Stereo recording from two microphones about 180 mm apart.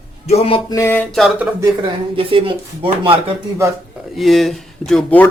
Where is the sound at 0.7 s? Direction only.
15° left (ahead or behind).